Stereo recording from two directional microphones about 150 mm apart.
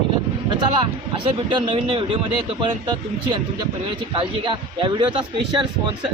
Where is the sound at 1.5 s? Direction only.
35° right (ahead or behind).